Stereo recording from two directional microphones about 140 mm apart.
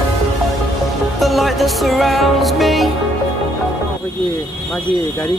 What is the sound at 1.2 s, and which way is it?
Music, centre (ahead or behind).